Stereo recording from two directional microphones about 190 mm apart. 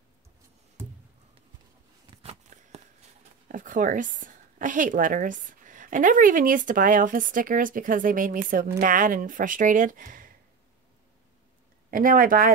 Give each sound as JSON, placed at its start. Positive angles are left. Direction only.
{"t": 2.2, "sound": "a sound", "side_deg": -35}
{"t": 3.4, "sound": "a woman's voice", "side_deg": -45}
{"t": 11.9, "sound": "a woman's voice", "side_deg": -50}